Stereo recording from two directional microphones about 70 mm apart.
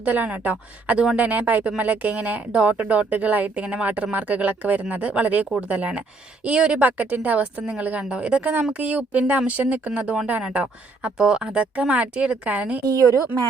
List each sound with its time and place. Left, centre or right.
0.0 s speech: right
12.8 s a woman's voice: right